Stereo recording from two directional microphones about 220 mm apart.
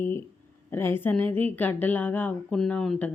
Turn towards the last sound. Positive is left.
turn(degrees=5)  # may be behind; listen again after turning